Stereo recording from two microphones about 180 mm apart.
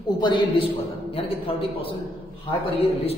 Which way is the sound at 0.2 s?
25° left (ahead or behind).